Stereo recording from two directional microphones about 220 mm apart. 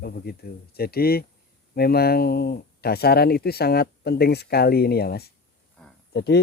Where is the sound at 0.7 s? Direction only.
45° left (ahead or behind).